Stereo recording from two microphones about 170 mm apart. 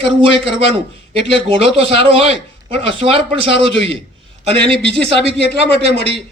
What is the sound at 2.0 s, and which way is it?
Speech, 35° right (ahead or behind).